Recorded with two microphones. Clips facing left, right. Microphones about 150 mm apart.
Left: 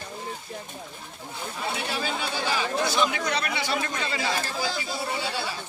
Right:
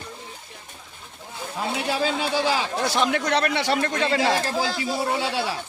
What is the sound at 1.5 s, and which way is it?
Speech, 90° right.